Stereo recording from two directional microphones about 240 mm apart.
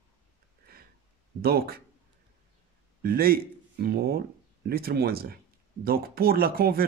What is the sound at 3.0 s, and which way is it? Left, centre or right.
Speech, right.